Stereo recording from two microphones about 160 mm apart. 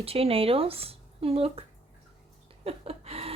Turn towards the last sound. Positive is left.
turn(degrees=-40)  # may be behind; listen again after turning